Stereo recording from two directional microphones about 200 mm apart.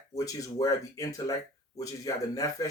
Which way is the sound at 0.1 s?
15° left (ahead or behind).